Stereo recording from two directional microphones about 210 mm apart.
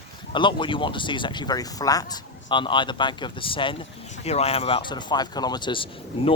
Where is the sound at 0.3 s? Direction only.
25° left (ahead or behind).